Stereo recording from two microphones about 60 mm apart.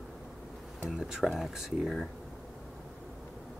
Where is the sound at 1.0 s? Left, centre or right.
Centre.